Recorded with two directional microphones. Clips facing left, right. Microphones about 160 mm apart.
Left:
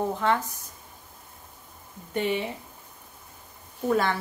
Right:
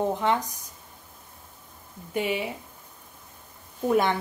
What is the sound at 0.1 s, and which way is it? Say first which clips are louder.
Speech: even; 15° right (ahead or behind).